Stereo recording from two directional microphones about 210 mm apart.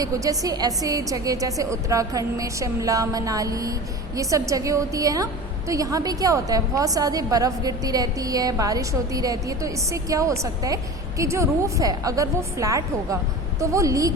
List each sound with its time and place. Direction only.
0.0 s a woman's voice: 15° right (ahead or behind)